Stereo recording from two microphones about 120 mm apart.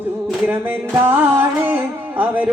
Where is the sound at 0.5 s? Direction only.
20° right (ahead or behind).